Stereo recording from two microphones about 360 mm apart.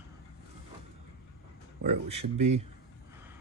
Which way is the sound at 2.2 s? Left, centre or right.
Right.